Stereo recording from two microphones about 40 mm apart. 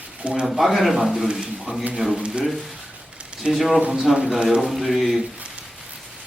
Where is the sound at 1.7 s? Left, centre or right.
Right.